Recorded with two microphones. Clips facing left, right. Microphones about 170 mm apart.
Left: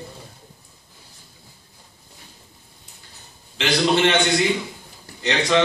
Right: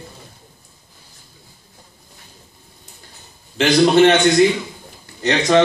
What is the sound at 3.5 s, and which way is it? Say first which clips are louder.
Speech: right 7 dB; 45° right (ahead or behind).